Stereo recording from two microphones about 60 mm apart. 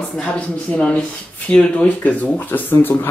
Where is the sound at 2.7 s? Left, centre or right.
Left.